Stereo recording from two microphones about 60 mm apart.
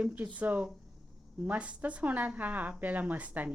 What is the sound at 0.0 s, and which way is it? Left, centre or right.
A woman's voice, right.